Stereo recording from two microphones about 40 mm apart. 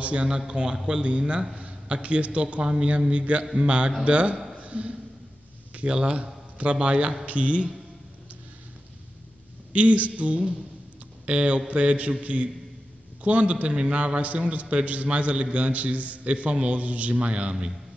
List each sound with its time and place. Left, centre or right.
0.0 s a man's voice: right
4.6 s a sound: right
5.9 s a man's voice: right
9.7 s a man's voice: right